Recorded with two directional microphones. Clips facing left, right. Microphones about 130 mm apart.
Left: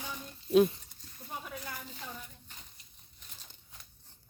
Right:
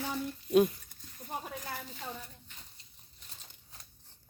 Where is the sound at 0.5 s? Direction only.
30° left (ahead or behind).